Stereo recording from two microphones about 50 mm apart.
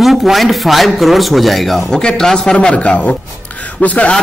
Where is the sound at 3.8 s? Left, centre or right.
Left.